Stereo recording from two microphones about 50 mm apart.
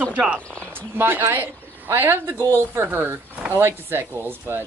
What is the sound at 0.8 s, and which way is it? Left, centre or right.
Speech, right.